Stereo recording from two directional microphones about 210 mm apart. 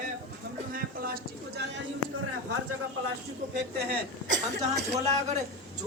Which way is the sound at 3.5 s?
55° right (ahead or behind).